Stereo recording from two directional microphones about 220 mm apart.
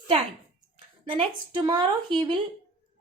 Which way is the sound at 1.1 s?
20° right (ahead or behind).